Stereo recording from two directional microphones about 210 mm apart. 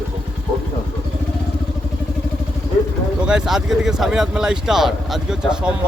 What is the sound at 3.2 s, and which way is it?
Speech, 5° right (ahead or behind).